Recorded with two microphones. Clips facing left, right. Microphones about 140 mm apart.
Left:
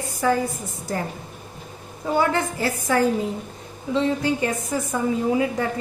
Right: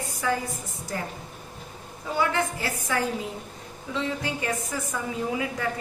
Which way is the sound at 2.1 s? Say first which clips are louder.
Left 4 dB; 40° left (ahead or behind).